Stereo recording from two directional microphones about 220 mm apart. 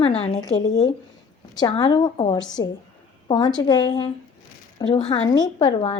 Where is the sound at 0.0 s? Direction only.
25° left (ahead or behind).